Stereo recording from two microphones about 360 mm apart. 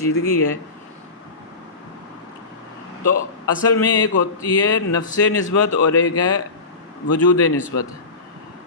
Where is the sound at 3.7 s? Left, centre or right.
Left.